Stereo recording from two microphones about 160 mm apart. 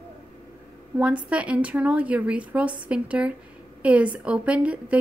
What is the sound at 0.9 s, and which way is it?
A woman's voice, 10° right (ahead or behind).